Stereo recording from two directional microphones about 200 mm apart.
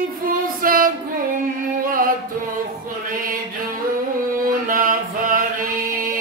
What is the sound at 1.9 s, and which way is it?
Music, 45° right (ahead or behind).